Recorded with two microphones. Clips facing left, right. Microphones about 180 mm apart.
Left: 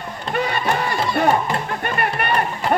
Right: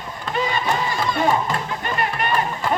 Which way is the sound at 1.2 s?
60° left (ahead or behind).